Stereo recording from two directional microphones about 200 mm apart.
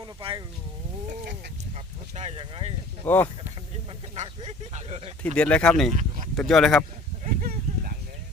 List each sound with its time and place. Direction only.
0.0 s speech: 25° right (ahead or behind)
1.7 s speech: 30° right (ahead or behind)
3.1 s speech: 10° left (ahead or behind)
4.1 s speech: 30° right (ahead or behind)
5.2 s speech: 5° left (ahead or behind)
5.9 s speech: 35° right (ahead or behind)
6.3 s speech: 5° left (ahead or behind)
7.3 s a sound: 45° right (ahead or behind)